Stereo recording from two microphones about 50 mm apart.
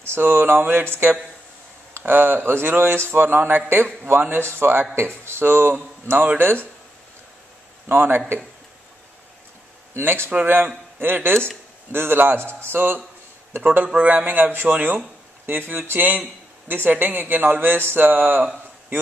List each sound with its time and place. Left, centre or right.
0.0 s speech: right
7.9 s speech: right
9.9 s speech: right
13.9 s speech: right